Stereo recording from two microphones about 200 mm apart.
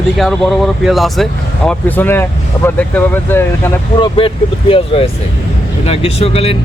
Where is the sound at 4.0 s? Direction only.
25° left (ahead or behind).